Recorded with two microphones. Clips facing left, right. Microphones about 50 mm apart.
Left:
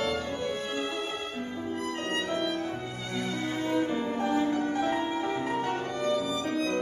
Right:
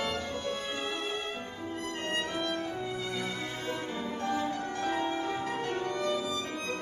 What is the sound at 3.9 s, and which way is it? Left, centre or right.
Music, centre.